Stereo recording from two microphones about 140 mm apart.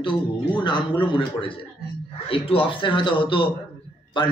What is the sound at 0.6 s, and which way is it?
A man's voice, 35° left (ahead or behind).